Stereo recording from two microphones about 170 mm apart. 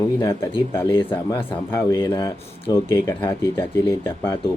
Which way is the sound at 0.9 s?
30° left (ahead or behind).